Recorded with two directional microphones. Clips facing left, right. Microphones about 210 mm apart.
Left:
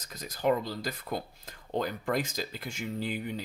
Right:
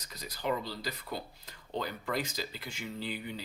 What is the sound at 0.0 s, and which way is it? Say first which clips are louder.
Speech: left 7 dB; 50° left (ahead or behind).